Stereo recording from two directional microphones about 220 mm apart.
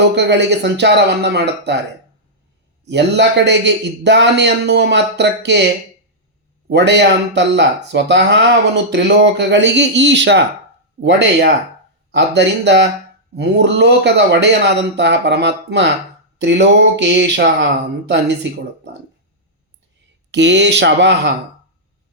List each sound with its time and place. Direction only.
0.2 s speech: 50° right (ahead or behind)
2.8 s speech: 50° right (ahead or behind)
6.7 s speech: 50° right (ahead or behind)
20.3 s speech: 55° right (ahead or behind)